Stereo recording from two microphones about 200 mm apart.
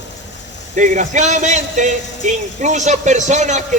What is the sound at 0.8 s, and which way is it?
A man's voice, 40° right (ahead or behind).